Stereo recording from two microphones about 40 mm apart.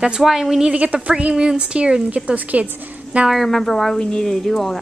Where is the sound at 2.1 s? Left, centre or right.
Right.